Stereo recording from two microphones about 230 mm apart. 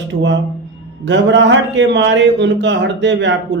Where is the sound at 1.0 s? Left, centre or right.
Right.